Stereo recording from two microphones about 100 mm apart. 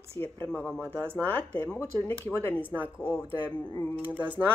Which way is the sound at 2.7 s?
15° right (ahead or behind).